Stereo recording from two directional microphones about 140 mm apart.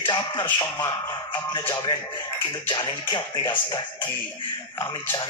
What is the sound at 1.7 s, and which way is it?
Speech, 35° left (ahead or behind).